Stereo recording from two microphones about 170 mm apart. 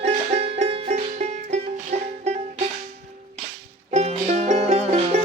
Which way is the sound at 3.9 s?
40° right (ahead or behind).